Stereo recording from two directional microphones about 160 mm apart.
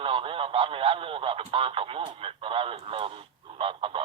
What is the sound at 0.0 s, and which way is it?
Speech, 35° right (ahead or behind).